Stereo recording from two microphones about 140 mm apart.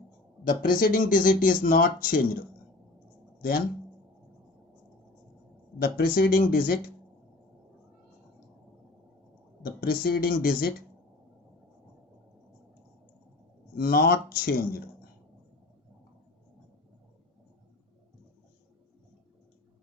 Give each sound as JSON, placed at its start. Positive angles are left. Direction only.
{"t": 0.4, "sound": "speech", "side_deg": 90}
{"t": 5.8, "sound": "speech", "side_deg": 90}
{"t": 9.6, "sound": "speech", "side_deg": 90}
{"t": 13.7, "sound": "speech", "side_deg": 90}